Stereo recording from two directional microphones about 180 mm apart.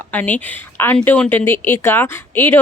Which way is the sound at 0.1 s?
10° left (ahead or behind).